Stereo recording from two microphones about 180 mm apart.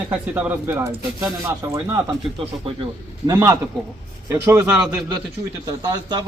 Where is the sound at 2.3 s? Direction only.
30° right (ahead or behind).